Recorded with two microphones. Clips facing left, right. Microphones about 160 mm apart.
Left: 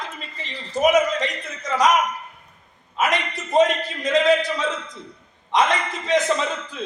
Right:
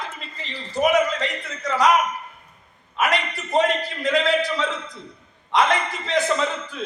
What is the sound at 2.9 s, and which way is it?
A man's voice, 20° left (ahead or behind).